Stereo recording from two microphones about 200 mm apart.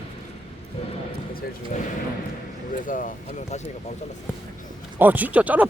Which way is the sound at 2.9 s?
40° left (ahead or behind).